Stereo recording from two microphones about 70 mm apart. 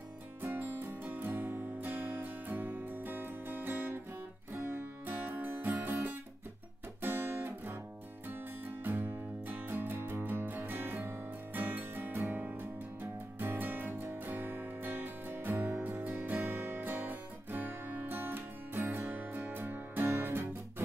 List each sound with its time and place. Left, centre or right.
0.4 s music: right
7.0 s guitar: right
8.8 s music: right